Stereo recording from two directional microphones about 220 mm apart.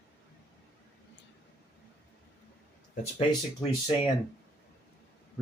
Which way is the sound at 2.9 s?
25° left (ahead or behind).